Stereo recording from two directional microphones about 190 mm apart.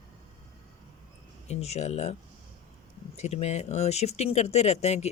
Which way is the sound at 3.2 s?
35° left (ahead or behind).